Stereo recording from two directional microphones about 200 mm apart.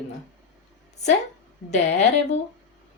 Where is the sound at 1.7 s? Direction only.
35° left (ahead or behind).